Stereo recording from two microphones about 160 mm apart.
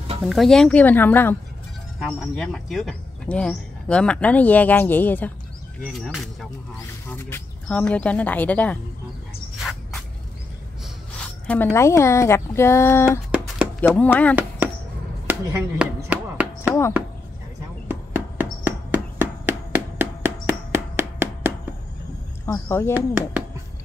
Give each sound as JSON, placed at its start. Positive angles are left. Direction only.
{"t": 0.2, "sound": "speech", "side_deg": 0}
{"t": 2.0, "sound": "speech", "side_deg": 0}
{"t": 5.9, "sound": "speech", "side_deg": 0}
{"t": 7.1, "sound": "speech", "side_deg": 15}
{"t": 9.6, "sound": "a sound", "side_deg": 0}
{"t": 11.4, "sound": "speech", "side_deg": 10}
{"t": 15.2, "sound": "chop", "side_deg": -10}
{"t": 17.8, "sound": "a sound", "side_deg": -10}
{"t": 22.5, "sound": "speech", "side_deg": 15}
{"t": 22.9, "sound": "speech", "side_deg": -10}